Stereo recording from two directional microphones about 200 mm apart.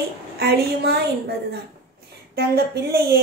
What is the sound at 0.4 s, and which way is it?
Speech, 50° right (ahead or behind).